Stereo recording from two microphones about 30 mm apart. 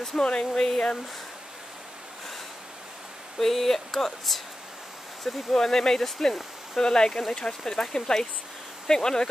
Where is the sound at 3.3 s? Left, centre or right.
Centre.